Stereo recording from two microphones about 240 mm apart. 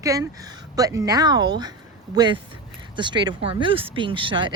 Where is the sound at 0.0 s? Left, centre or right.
Centre.